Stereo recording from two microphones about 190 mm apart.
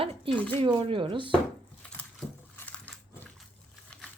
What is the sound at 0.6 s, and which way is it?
Speech, 30° right (ahead or behind).